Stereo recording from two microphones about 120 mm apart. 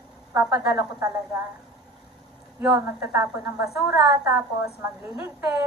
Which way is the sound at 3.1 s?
15° right (ahead or behind).